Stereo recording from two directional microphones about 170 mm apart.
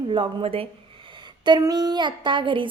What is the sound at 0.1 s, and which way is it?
A woman's voice, 30° right (ahead or behind).